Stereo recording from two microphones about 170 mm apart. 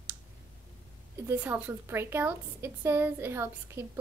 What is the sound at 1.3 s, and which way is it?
A woman's voice, 10° right (ahead or behind).